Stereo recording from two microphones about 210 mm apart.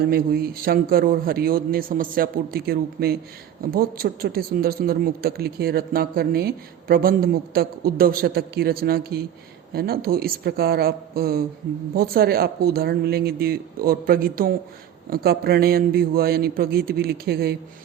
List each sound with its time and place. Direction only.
0.0 s speech: 45° right (ahead or behind)